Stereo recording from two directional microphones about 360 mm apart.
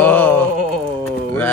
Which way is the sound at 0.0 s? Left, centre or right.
Centre.